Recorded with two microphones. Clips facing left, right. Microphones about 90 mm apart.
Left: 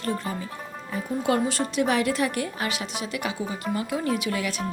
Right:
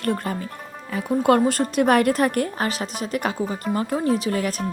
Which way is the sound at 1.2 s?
50° right (ahead or behind).